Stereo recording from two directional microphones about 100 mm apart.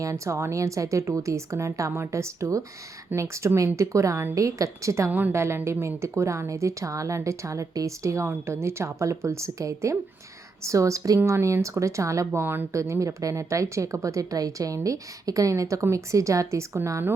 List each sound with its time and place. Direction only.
0.0 s speech: 30° right (ahead or behind)